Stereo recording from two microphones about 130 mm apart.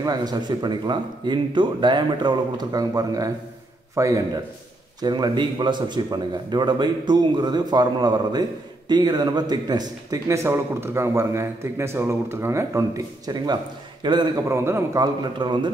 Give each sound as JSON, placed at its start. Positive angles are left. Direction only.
{"t": 0.0, "sound": "a man's voice", "side_deg": -30}
{"t": 14.5, "sound": "a man's voice", "side_deg": -20}
{"t": 15.3, "sound": "a man's voice", "side_deg": -35}